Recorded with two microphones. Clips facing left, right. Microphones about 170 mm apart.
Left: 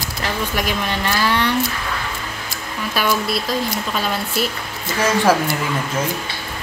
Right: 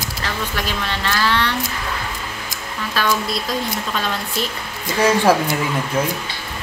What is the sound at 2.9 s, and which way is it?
Speech, 10° left (ahead or behind).